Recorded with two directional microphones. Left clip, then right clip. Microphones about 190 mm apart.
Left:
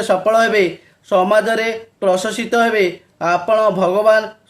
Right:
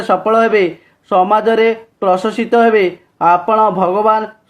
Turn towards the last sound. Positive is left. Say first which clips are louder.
# right 1 dB
turn(degrees=-20)  # may be behind; listen again after turning